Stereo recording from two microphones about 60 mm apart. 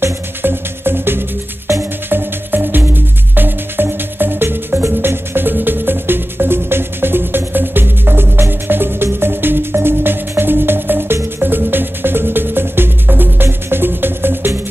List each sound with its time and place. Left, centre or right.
0.0 s music: right
1.7 s music: right
2.0 s music: right